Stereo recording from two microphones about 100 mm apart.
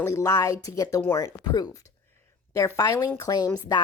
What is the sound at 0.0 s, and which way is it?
Speech, 30° left (ahead or behind).